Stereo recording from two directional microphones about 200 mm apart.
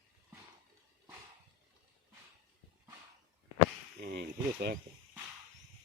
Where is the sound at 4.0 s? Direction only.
50° right (ahead or behind).